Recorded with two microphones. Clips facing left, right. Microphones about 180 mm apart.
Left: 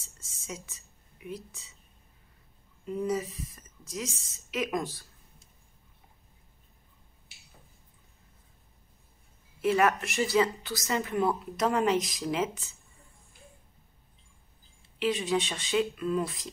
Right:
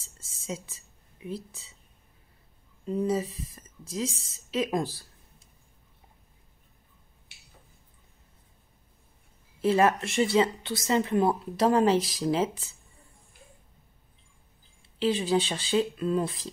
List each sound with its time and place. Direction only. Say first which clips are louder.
0.0 s a sound: right 6 dB; 30° right (ahead or behind)
2.9 s speech: right 3 dB; 30° right (ahead or behind)
9.6 s speech: right 2 dB; 30° right (ahead or behind)
15.0 s speech: right 3 dB; 30° right (ahead or behind)